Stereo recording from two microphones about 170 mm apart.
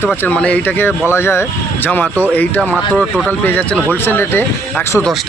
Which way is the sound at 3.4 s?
10° left (ahead or behind).